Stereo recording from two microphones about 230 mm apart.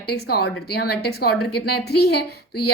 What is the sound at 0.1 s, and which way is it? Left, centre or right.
Speech, left.